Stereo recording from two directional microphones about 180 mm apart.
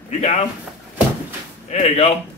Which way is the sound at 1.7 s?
35° left (ahead or behind).